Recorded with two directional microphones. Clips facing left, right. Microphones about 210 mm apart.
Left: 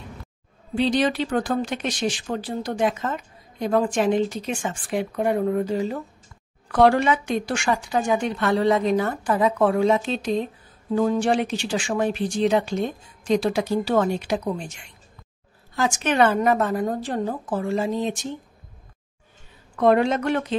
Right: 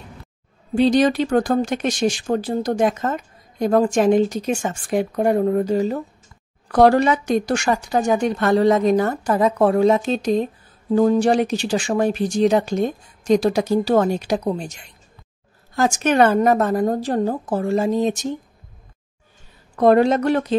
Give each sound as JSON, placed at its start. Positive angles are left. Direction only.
{"t": 0.7, "sound": "speech", "side_deg": -45}
{"t": 19.7, "sound": "speech", "side_deg": -40}